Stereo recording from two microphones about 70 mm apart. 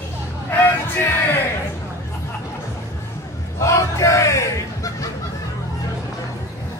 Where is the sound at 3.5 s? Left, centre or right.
Left.